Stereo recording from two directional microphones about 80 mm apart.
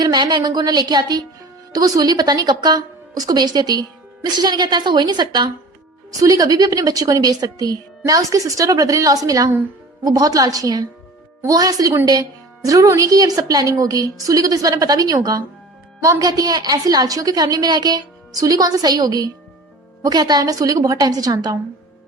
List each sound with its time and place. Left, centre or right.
0.0 s a woman's voice: right
6.2 s a woman's voice: right